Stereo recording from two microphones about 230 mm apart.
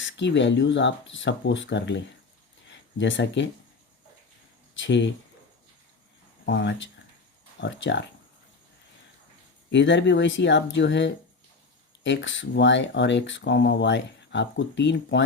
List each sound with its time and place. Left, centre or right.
0.0 s speech: left
4.8 s speech: left
6.4 s speech: left
9.7 s speech: left